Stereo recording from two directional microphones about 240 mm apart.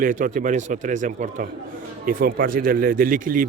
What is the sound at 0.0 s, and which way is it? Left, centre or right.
A man's voice, right.